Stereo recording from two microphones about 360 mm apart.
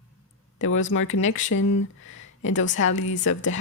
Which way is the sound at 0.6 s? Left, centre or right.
Left.